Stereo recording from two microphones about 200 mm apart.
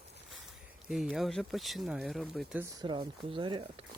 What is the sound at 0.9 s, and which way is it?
Speech, centre (ahead or behind).